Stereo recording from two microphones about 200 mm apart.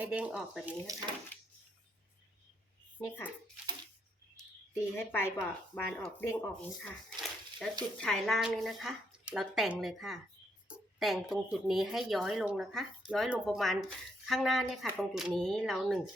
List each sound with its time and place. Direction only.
0.0 s speech: 5° right (ahead or behind)
0.9 s a child's voice: 15° right (ahead or behind)
3.0 s speech: 10° left (ahead or behind)
4.7 s speech: 10° left (ahead or behind)